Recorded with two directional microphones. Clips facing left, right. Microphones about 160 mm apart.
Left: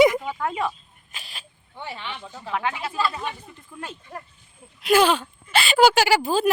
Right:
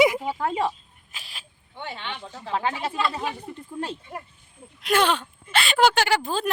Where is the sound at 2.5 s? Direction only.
30° right (ahead or behind).